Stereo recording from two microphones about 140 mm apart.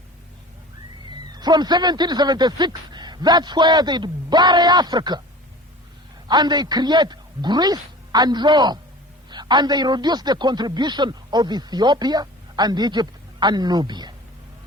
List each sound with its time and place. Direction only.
1.3 s a man's voice: 30° right (ahead or behind)
6.2 s a man's voice: 30° right (ahead or behind)